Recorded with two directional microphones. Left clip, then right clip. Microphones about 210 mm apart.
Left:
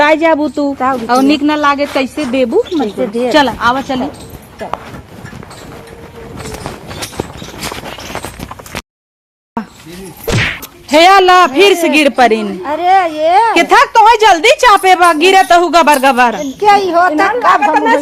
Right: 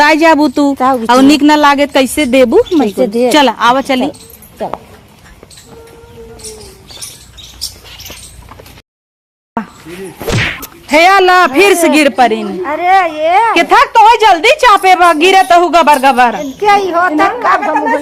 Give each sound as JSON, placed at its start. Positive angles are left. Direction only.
{"t": 0.0, "sound": "speech", "side_deg": -50}
{"t": 9.6, "sound": "speech", "side_deg": -15}
{"t": 10.2, "sound": "whack", "side_deg": 0}
{"t": 10.6, "sound": "speech", "side_deg": -15}
{"t": 12.0, "sound": "speech", "side_deg": 10}
{"t": 15.9, "sound": "speech", "side_deg": 0}